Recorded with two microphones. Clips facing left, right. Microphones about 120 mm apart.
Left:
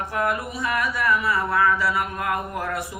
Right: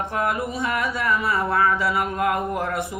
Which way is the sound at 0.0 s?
25° right (ahead or behind).